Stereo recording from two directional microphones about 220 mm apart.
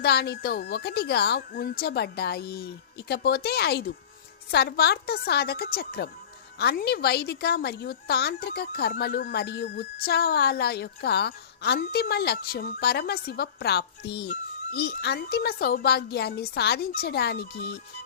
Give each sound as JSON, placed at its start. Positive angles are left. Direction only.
{"t": 0.0, "sound": "a woman's voice", "side_deg": 45}